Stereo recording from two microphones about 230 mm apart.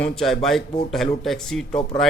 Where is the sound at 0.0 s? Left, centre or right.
Centre.